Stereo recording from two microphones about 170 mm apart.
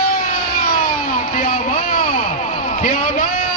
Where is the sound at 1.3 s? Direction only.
50° left (ahead or behind).